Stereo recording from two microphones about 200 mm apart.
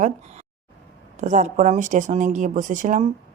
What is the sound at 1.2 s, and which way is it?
Speech, 40° right (ahead or behind).